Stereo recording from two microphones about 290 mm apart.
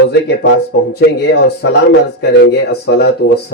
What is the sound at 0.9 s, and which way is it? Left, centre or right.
Speech, left.